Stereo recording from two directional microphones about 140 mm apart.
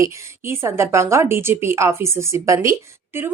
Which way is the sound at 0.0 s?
20° right (ahead or behind).